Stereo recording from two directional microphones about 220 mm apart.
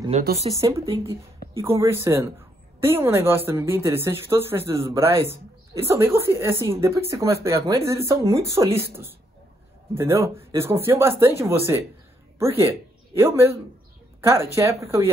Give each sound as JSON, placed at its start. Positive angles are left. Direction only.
{"t": 0.1, "sound": "speech", "side_deg": -30}
{"t": 0.6, "sound": "a woman's voice", "side_deg": -15}
{"t": 9.9, "sound": "a woman's voice", "side_deg": -15}